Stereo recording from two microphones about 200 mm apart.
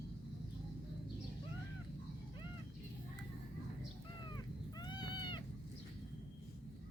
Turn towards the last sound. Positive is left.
turn(degrees=20)  # may be behind; listen again after turning